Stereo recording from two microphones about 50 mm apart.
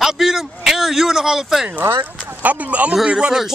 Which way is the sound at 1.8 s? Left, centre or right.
Right.